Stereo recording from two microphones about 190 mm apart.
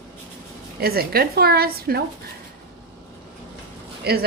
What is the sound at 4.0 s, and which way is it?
Speech, 55° right (ahead or behind).